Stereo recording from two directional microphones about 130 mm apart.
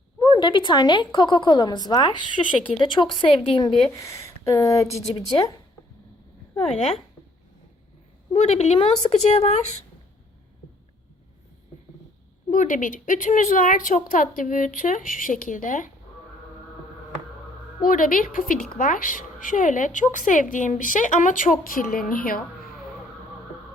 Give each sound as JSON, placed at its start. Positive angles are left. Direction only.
{"t": 0.2, "sound": "a woman's voice", "side_deg": 35}
{"t": 3.9, "sound": "speech", "side_deg": 25}
{"t": 8.3, "sound": "a woman's voice", "side_deg": 55}
{"t": 12.5, "sound": "a woman's voice", "side_deg": 90}
{"t": 17.8, "sound": "a woman's voice", "side_deg": 90}